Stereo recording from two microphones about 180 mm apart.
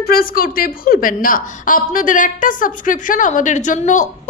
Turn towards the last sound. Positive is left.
turn(degrees=45)  # may be behind; listen again after turning